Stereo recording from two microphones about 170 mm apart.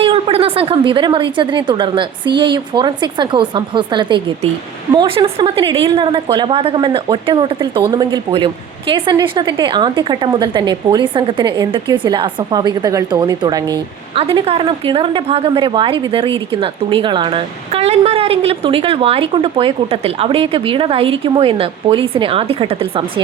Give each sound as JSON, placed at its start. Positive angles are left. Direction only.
{"t": 0.0, "sound": "a woman's voice", "side_deg": -35}
{"t": 14.2, "sound": "a woman's voice", "side_deg": -35}